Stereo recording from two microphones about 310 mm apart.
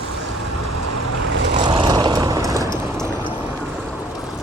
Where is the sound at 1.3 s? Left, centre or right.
Right.